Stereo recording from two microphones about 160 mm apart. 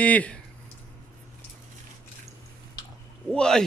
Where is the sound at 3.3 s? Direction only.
5° left (ahead or behind).